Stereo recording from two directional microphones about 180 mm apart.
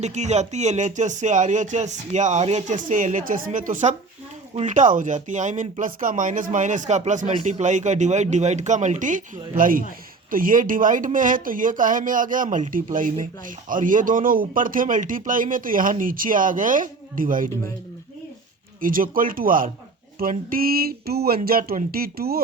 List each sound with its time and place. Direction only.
0.0 s speech: 40° right (ahead or behind)
18.8 s speech: 50° right (ahead or behind)